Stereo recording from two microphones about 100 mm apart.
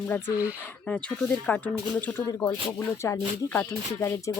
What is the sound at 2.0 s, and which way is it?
Speech, 20° left (ahead or behind).